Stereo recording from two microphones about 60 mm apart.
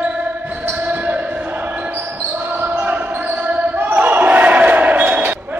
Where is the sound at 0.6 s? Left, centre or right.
Right.